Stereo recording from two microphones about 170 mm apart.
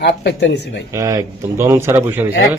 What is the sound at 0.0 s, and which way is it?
Speech, 90° left.